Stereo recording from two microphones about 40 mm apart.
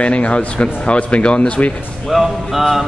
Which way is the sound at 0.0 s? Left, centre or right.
Left.